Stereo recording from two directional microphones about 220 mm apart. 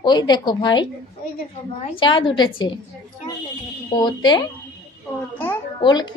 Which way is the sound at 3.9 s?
20° left (ahead or behind).